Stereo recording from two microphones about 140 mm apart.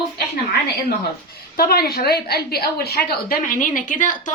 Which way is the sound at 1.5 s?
90° left.